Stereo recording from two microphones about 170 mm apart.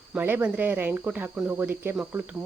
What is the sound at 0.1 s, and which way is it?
A woman's voice, 10° right (ahead or behind).